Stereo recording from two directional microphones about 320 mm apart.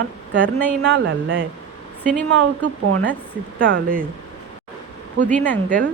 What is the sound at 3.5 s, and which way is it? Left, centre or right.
Speech, right.